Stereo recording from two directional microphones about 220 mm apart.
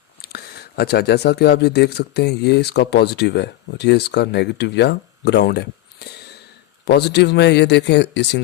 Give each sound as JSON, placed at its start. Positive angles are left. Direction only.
{"t": 0.2, "sound": "speech", "side_deg": 45}